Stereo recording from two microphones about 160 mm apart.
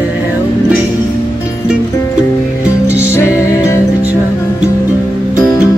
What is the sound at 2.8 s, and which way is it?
Music, 10° right (ahead or behind).